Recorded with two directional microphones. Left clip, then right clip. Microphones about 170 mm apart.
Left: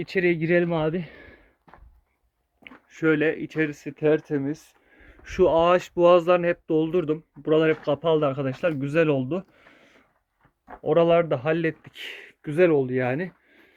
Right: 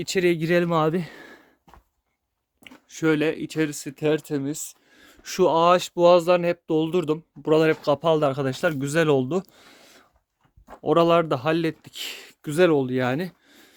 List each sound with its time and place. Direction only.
0.0 s speech: 30° right (ahead or behind)
2.6 s speech: 35° right (ahead or behind)